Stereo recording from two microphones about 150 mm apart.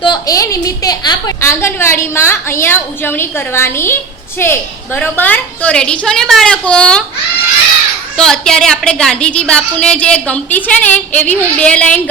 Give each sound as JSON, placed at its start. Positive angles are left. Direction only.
{"t": 0.0, "sound": "a woman's voice", "side_deg": 25}
{"t": 8.1, "sound": "a woman's voice", "side_deg": 5}